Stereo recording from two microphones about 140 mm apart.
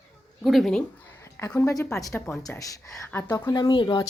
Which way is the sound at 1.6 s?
20° left (ahead or behind).